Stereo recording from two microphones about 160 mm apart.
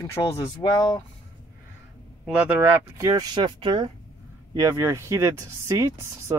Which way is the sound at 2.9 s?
20° right (ahead or behind).